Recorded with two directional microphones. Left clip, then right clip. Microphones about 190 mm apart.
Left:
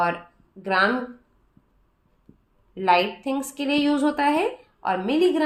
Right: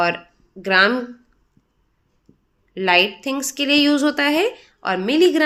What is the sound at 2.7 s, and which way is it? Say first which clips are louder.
A woman's voice: right 3 dB; 35° right (ahead or behind).